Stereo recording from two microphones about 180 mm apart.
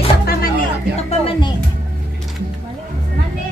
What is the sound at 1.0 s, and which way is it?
Music, 35° left (ahead or behind).